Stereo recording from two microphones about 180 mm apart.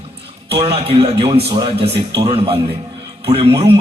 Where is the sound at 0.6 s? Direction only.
35° right (ahead or behind).